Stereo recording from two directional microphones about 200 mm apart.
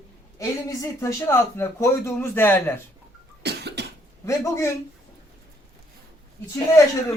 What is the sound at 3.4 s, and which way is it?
Cough, 55° right (ahead or behind).